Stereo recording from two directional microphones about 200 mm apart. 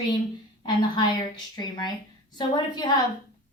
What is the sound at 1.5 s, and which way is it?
A woman's voice, 20° left (ahead or behind).